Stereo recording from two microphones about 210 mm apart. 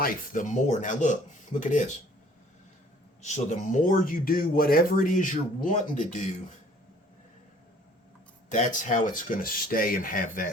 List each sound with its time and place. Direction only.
0.0 s speech: 40° left (ahead or behind)
3.2 s speech: 35° left (ahead or behind)
8.4 s speech: 35° left (ahead or behind)